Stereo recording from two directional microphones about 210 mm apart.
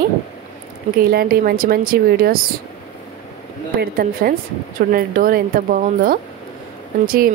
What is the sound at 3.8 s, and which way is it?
Speech, 45° right (ahead or behind).